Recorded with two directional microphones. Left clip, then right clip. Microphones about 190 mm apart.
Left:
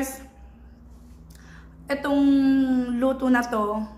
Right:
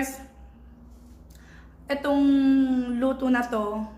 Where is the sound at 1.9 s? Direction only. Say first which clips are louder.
Left 1 dB; centre (ahead or behind).